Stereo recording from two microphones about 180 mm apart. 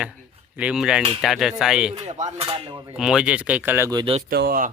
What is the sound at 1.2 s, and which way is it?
Speech, centre (ahead or behind).